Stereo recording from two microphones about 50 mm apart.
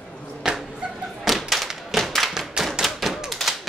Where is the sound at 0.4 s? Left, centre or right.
Centre.